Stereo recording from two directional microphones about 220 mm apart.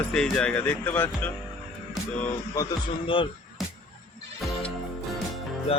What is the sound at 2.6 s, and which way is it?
Speech, 15° left (ahead or behind).